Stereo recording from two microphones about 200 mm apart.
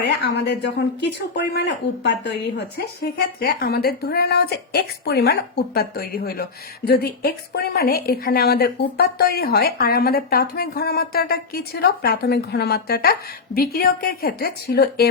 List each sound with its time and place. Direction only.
0.0 s a woman's voice: 55° left (ahead or behind)